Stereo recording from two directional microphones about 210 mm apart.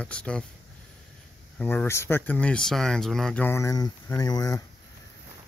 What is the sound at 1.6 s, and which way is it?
Speech, 10° left (ahead or behind).